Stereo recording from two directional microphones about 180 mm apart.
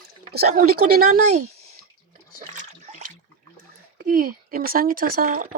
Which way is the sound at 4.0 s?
50° right (ahead or behind).